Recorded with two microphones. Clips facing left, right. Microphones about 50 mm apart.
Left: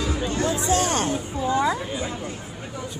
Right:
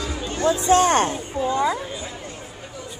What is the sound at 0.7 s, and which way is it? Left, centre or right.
Speech, right.